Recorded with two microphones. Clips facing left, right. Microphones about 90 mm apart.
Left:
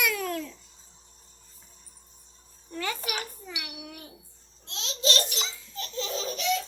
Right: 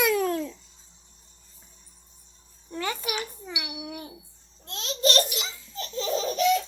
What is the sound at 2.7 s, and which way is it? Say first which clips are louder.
Babbling: right 2 dB; 25° right (ahead or behind).